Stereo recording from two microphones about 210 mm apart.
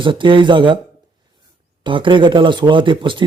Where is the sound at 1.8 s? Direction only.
25° right (ahead or behind).